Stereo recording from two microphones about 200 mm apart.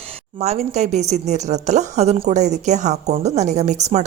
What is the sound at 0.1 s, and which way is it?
A woman's voice, 30° right (ahead or behind).